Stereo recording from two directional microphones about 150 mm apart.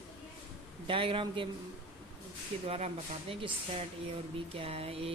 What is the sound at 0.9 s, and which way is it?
Speech, 35° right (ahead or behind).